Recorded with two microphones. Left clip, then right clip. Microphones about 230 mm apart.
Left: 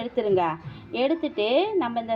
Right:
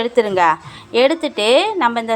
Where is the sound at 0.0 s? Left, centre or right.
Right.